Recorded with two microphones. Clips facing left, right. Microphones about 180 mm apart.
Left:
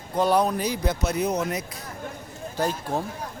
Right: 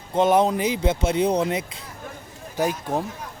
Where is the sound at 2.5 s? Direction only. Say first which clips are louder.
Right 3 dB; 15° right (ahead or behind).